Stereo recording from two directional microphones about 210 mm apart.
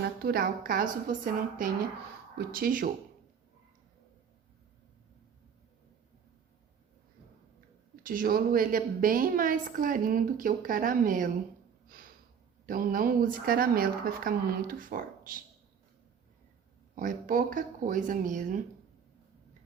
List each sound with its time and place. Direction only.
0.2 s a woman's voice: 45° right (ahead or behind)
8.0 s a woman's voice: 40° right (ahead or behind)
12.6 s speech: 40° right (ahead or behind)
16.9 s a woman's voice: 40° right (ahead or behind)